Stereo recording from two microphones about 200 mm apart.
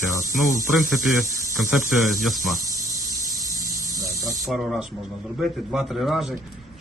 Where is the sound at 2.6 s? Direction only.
15° right (ahead or behind).